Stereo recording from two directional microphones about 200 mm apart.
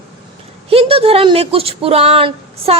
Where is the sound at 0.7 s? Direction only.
30° right (ahead or behind).